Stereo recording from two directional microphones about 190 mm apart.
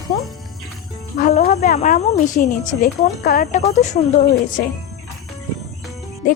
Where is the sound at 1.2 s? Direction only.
40° left (ahead or behind).